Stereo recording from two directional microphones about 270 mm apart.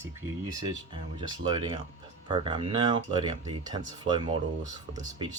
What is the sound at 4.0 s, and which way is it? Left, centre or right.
Speech, centre.